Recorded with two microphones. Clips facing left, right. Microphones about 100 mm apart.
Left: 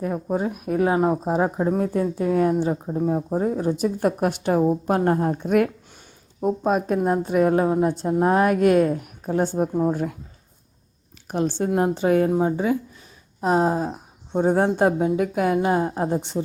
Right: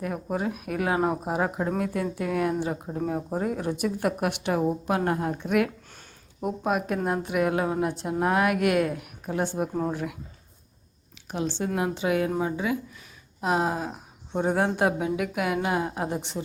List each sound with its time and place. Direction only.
0.0 s speech: 25° left (ahead or behind)
0.9 s a woman's voice: 20° left (ahead or behind); by 10.2 s 40° left (ahead or behind)
11.3 s a woman's voice: 45° left (ahead or behind)